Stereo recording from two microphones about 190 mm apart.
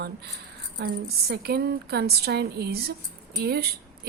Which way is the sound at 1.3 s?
55° right (ahead or behind).